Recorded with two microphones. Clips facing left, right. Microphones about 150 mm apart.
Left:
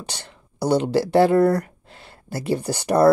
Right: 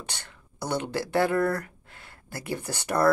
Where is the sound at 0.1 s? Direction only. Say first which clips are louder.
Left 5 dB; 15° left (ahead or behind).